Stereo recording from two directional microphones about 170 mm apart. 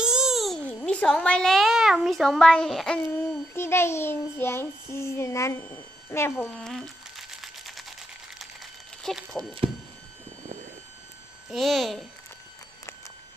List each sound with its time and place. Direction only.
0.0 s speech: 5° right (ahead or behind)
9.0 s speech: centre (ahead or behind)
9.6 s speech: 35° right (ahead or behind)
11.5 s speech: centre (ahead or behind)